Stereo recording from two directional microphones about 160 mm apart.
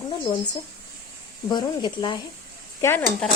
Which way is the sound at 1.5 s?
25° left (ahead or behind).